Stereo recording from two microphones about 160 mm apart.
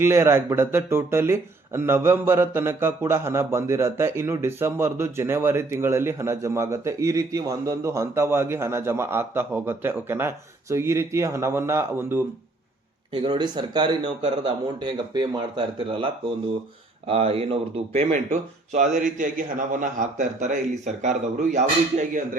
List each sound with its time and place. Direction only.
0.0 s speech: 15° right (ahead or behind)
13.1 s a man's voice: 30° right (ahead or behind)
18.1 s a man's voice: 50° right (ahead or behind)